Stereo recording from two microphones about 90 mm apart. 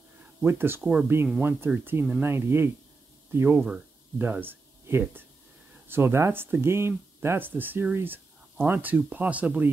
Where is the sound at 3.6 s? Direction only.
10° right (ahead or behind).